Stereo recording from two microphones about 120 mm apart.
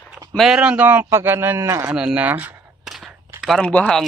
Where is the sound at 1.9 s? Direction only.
10° right (ahead or behind).